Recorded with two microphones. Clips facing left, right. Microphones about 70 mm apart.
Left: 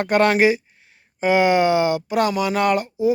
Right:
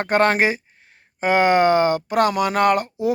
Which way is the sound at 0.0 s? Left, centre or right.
Right.